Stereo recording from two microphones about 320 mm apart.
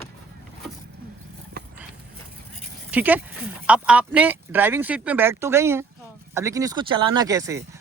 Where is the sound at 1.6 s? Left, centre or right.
Right.